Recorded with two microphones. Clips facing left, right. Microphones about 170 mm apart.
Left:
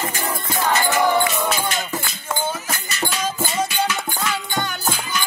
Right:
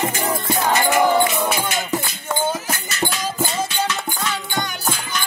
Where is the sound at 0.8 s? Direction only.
15° right (ahead or behind).